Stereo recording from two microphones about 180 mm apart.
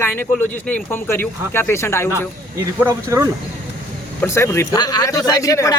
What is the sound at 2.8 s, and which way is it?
Speech, 15° right (ahead or behind).